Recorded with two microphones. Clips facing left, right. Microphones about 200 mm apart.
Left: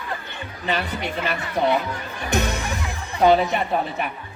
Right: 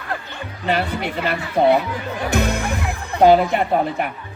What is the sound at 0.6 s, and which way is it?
Speech, 60° right (ahead or behind).